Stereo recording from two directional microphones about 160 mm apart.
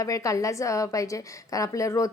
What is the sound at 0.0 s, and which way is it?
A woman's voice, 20° left (ahead or behind).